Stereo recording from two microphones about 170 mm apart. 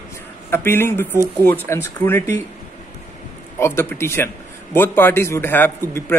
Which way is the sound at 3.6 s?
15° left (ahead or behind).